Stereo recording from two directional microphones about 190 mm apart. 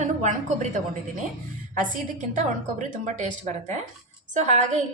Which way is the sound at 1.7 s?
40° right (ahead or behind).